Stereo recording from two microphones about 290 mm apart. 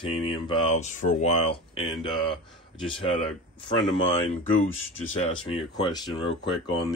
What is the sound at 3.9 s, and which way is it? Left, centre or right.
Speech, left.